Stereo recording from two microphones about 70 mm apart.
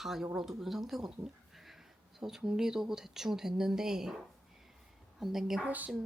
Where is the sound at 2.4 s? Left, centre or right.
Centre.